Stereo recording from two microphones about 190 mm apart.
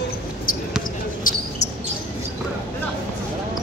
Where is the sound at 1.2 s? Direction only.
45° left (ahead or behind).